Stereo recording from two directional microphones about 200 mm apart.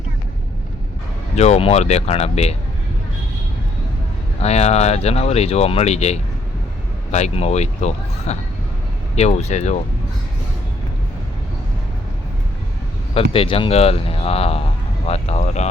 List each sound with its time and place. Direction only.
1.4 s speech: 30° left (ahead or behind)
4.4 s speech: 35° left (ahead or behind)
13.3 s speech: 25° left (ahead or behind)